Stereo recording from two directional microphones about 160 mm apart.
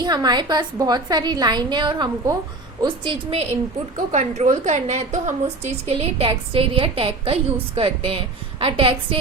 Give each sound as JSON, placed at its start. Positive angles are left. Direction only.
{"t": 0.0, "sound": "a woman's voice", "side_deg": -25}
{"t": 3.9, "sound": "a woman's voice", "side_deg": -45}